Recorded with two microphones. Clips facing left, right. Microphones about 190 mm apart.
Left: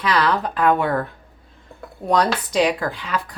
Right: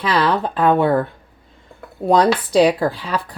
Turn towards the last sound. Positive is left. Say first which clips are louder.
# right 4 dB
turn(degrees=-35)  # may be behind; listen again after turning